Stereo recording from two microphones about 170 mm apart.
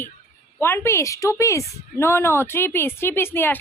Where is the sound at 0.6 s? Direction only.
15° left (ahead or behind).